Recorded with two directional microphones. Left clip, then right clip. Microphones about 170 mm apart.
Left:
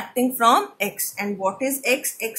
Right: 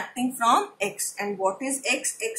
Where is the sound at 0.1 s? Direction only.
40° left (ahead or behind).